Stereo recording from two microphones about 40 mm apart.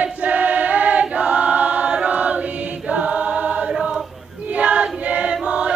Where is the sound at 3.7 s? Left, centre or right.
Right.